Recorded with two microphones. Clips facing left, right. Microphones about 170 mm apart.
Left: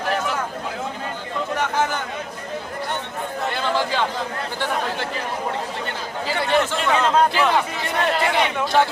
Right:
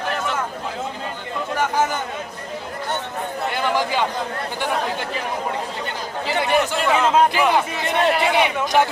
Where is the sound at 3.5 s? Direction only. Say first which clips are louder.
Right 2 dB; 15° right (ahead or behind).